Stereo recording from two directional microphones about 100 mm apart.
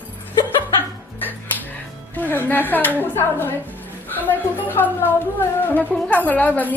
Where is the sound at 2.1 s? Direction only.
20° left (ahead or behind).